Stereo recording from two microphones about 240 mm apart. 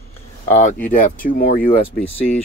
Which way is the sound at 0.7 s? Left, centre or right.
Left.